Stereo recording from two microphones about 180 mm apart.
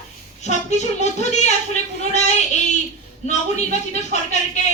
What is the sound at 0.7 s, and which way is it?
Speech, 40° left (ahead or behind).